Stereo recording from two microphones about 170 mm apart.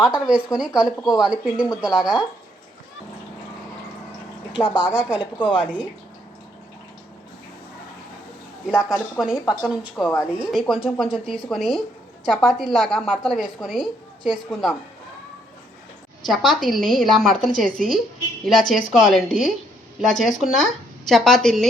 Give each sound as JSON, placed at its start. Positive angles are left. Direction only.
{"t": 0.0, "sound": "a woman's voice", "side_deg": -5}
{"t": 0.9, "sound": "a woman's voice", "side_deg": 20}
{"t": 1.2, "sound": "a woman's voice", "side_deg": -5}
{"t": 4.5, "sound": "a woman's voice", "side_deg": 25}
{"t": 8.6, "sound": "a woman's voice", "side_deg": -5}
{"t": 9.3, "sound": "a woman's voice", "side_deg": 20}
{"t": 9.6, "sound": "a woman's voice", "side_deg": -5}
{"t": 16.2, "sound": "a woman's voice", "side_deg": 0}